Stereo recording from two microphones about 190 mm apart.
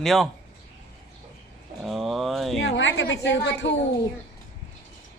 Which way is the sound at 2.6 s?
70° left (ahead or behind).